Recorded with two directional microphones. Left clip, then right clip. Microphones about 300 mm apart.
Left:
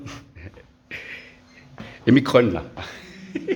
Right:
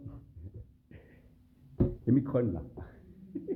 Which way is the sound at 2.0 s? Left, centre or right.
Left.